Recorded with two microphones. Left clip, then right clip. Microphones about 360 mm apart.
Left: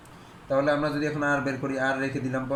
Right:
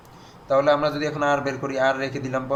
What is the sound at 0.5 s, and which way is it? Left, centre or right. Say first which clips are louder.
A man's voice: right 5 dB; right.